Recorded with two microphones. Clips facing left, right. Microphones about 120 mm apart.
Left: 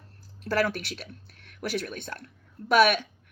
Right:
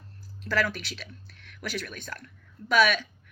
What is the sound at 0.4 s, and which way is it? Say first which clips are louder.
Speech: left 2 dB; 55° left (ahead or behind).